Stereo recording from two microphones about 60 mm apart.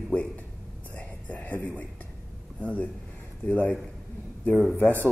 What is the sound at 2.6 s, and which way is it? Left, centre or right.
Speech, left.